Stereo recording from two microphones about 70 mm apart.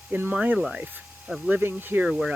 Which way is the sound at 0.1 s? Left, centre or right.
Right.